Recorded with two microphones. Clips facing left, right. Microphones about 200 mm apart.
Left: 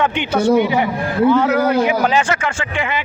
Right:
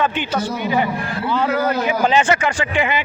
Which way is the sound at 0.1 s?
70° left (ahead or behind).